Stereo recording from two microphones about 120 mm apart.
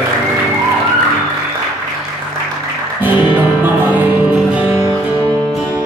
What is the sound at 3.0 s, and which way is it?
Music, 15° right (ahead or behind).